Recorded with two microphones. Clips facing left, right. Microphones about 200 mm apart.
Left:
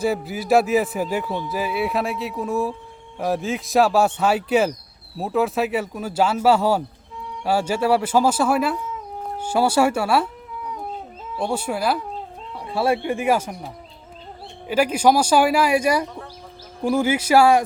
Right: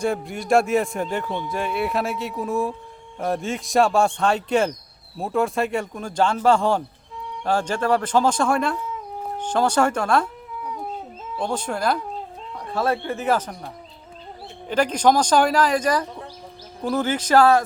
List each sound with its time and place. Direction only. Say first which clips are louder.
0.0 s speech: left 2 dB; 5° left (ahead or behind)
14.7 s speech: left 1 dB; 10° left (ahead or behind)